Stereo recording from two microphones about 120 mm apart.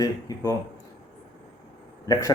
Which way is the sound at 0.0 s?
30° left (ahead or behind).